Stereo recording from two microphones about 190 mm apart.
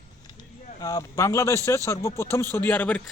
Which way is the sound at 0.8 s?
20° left (ahead or behind).